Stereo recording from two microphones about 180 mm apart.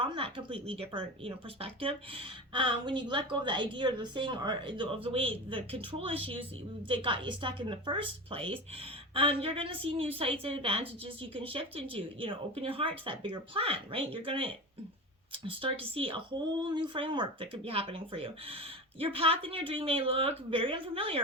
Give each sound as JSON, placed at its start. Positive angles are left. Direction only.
{"t": 0.0, "sound": "a woman's voice", "side_deg": -30}